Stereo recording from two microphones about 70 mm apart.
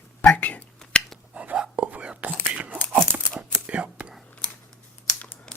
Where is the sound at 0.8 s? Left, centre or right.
Centre.